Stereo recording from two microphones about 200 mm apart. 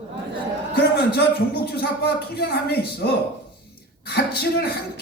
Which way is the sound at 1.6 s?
50° left (ahead or behind).